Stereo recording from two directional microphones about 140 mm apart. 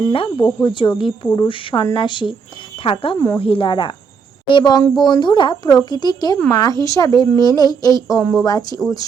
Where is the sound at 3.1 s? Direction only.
20° left (ahead or behind).